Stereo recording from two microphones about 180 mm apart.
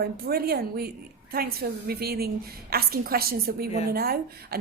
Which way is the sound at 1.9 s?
60° right (ahead or behind).